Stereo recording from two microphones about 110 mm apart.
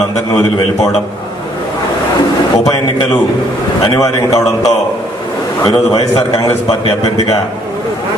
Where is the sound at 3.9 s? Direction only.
30° left (ahead or behind).